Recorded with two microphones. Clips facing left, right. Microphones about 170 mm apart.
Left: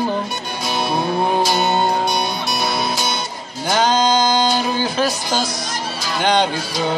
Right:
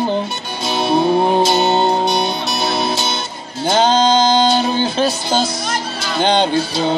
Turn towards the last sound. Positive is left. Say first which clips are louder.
# right 4 dB
turn(degrees=-25)  # may be behind; listen again after turning